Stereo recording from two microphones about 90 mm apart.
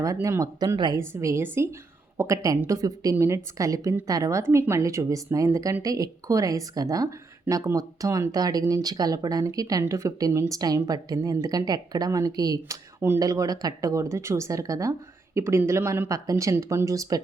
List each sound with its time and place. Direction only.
0.0 s speech: 35° right (ahead or behind)
0.9 s a woman's voice: 35° right (ahead or behind)